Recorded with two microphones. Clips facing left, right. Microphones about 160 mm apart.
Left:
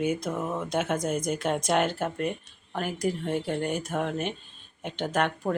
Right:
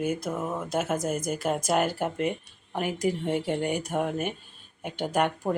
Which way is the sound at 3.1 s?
15° right (ahead or behind).